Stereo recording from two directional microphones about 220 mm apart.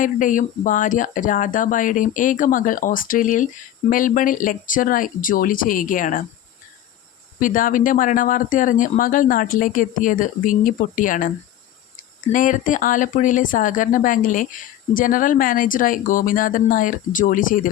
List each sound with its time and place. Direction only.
0.0 s speech: 35° left (ahead or behind)
7.3 s speech: 40° left (ahead or behind)
12.3 s speech: 35° left (ahead or behind)